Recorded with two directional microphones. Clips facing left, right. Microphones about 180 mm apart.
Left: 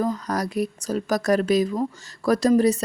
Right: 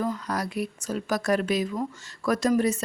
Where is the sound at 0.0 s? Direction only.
40° left (ahead or behind).